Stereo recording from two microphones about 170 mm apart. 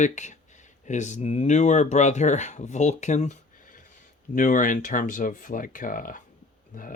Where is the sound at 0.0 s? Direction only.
45° left (ahead or behind).